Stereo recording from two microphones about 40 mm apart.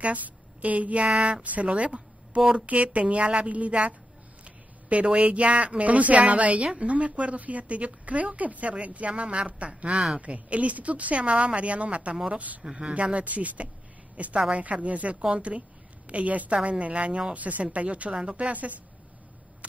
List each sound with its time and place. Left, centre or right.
0.0 s a woman's voice: right
5.0 s speech: right
12.6 s a woman's voice: right